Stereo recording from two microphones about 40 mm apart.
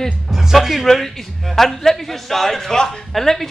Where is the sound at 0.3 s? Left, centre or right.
Centre.